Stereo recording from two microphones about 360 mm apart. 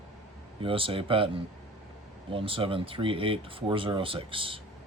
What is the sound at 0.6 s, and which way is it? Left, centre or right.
Speech, centre.